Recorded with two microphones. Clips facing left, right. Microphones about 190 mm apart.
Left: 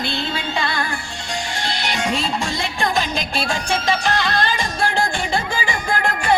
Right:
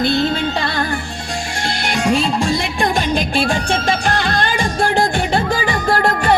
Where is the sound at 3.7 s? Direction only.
50° right (ahead or behind).